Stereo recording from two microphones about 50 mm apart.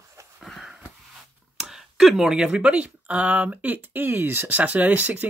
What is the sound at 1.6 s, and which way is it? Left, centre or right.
Speech, centre.